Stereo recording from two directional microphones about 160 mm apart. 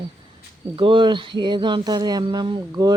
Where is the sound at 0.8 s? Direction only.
30° right (ahead or behind).